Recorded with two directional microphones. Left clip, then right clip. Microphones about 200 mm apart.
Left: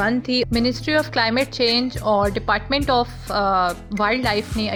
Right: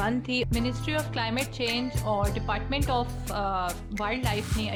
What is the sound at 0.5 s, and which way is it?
Speech, 30° left (ahead or behind).